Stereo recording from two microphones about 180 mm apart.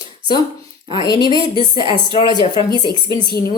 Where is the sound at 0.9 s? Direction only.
20° left (ahead or behind).